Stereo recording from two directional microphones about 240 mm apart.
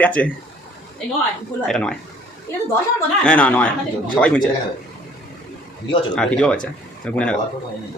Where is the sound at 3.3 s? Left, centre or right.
Centre.